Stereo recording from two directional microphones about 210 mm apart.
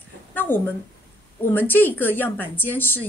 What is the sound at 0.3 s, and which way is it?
A woman's voice, 10° left (ahead or behind).